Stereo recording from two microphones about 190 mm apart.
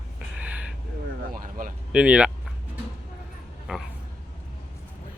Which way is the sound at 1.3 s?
45° right (ahead or behind).